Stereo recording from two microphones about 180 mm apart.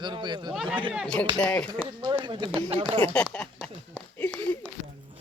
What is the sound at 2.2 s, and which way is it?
Speech, 25° right (ahead or behind).